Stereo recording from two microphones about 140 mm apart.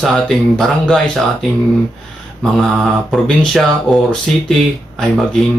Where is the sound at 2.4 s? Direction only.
Centre (ahead or behind).